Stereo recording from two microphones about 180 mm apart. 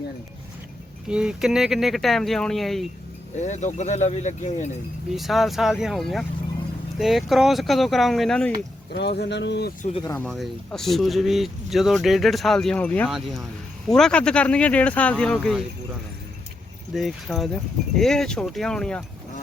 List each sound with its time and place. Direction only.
1.0 s speech: 5° right (ahead or behind)
3.3 s speech: 40° left (ahead or behind)
5.1 s speech: centre (ahead or behind)
8.9 s speech: 65° left (ahead or behind)
10.2 s speech: centre (ahead or behind)
16.9 s speech: centre (ahead or behind)